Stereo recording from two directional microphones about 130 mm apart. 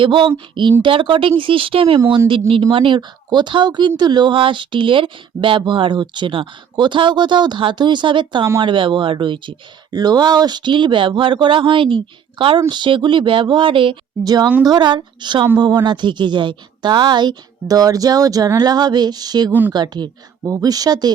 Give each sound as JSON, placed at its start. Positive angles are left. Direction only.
{"t": 0.0, "sound": "speech", "side_deg": -40}
{"t": 19.5, "sound": "speech", "side_deg": -15}
{"t": 19.7, "sound": "speech", "side_deg": -35}